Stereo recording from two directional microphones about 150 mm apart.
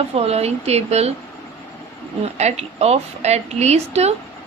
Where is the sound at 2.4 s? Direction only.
45° right (ahead or behind).